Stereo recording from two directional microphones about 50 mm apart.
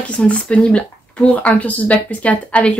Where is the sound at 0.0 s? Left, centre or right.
Left.